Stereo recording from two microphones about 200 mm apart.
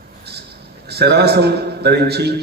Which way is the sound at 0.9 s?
55° right (ahead or behind).